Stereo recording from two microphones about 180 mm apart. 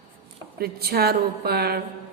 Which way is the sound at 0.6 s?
60° right (ahead or behind).